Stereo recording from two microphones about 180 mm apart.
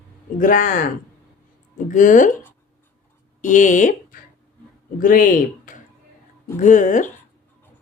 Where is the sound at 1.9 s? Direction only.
45° left (ahead or behind).